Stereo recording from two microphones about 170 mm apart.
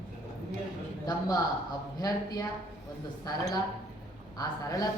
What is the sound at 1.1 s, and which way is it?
A man's voice, 20° left (ahead or behind).